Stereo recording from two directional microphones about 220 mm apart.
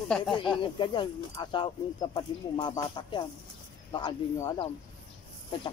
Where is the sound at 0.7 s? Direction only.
20° left (ahead or behind).